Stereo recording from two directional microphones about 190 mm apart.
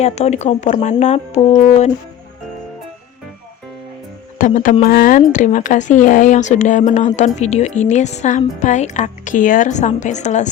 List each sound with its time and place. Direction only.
0.0 s speech: 35° left (ahead or behind)
4.4 s speech: 40° left (ahead or behind)